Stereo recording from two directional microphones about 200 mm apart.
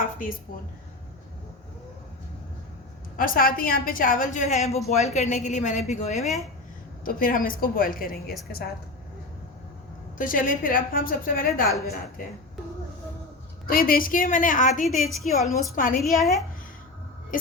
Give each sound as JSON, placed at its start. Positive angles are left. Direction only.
{"t": 3.2, "sound": "a woman's voice", "side_deg": 45}
{"t": 6.2, "sound": "a woman's voice", "side_deg": 0}
{"t": 7.0, "sound": "a woman's voice", "side_deg": 45}
{"t": 10.2, "sound": "a woman's voice", "side_deg": 45}
{"t": 13.7, "sound": "a woman's voice", "side_deg": 45}
{"t": 14.8, "sound": "a woman's voice", "side_deg": 0}
{"t": 15.7, "sound": "a woman's voice", "side_deg": 45}
{"t": 16.0, "sound": "a woman's voice", "side_deg": 0}